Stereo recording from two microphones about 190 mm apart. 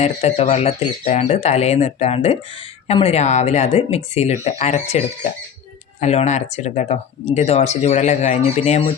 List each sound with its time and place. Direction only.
0.0 s speech: 35° left (ahead or behind)